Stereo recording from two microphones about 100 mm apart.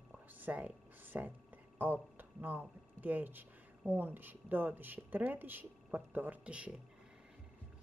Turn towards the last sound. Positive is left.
turn(degrees=-10)  # may be behind; listen again after turning